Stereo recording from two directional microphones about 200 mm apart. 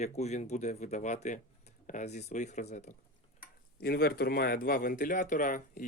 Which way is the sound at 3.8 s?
50° left (ahead or behind).